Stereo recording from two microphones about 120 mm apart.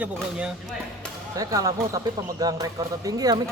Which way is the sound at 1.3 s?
30° right (ahead or behind).